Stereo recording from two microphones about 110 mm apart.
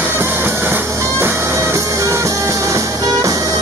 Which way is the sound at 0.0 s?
20° right (ahead or behind).